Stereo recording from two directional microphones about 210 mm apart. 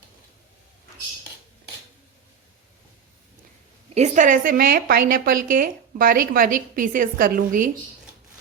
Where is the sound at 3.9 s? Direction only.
35° right (ahead or behind).